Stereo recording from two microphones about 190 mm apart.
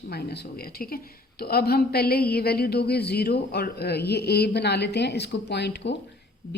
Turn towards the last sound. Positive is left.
turn(degrees=60)  # may be behind; listen again after turning